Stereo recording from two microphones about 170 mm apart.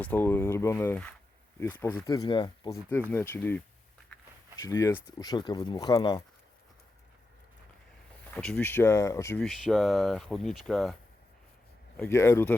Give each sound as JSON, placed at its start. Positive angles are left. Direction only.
{"t": 0.0, "sound": "speech", "side_deg": 10}
{"t": 3.1, "sound": "speech", "side_deg": 10}
{"t": 4.6, "sound": "speech", "side_deg": 15}
{"t": 8.3, "sound": "speech", "side_deg": 5}
{"t": 9.4, "sound": "speech", "side_deg": 0}
{"t": 11.9, "sound": "speech", "side_deg": 15}